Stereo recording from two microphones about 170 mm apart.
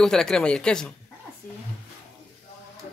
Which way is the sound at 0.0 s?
5° left (ahead or behind).